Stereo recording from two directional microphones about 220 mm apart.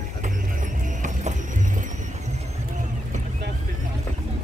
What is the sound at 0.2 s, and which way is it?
Vehicle, 35° right (ahead or behind).